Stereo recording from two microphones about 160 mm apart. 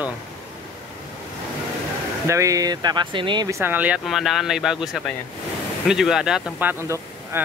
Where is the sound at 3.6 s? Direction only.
10° right (ahead or behind).